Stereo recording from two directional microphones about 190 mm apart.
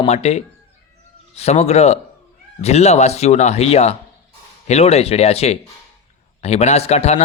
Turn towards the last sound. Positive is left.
turn(degrees=35)  # may be behind; listen again after turning